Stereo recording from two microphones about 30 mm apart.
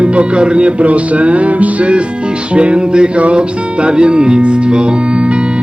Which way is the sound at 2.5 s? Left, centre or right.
Right.